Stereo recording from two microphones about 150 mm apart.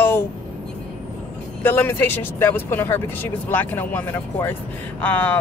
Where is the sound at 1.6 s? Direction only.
15° left (ahead or behind).